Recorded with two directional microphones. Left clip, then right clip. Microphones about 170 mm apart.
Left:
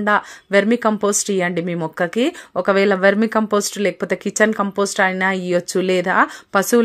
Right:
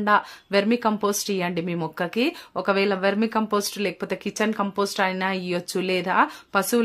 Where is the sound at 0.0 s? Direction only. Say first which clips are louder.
Left 3 dB; 25° left (ahead or behind).